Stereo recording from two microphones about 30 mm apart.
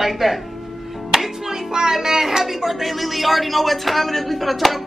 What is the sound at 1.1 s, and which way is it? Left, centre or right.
Music, centre.